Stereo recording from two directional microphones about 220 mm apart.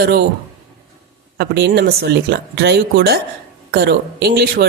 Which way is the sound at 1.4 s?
50° right (ahead or behind).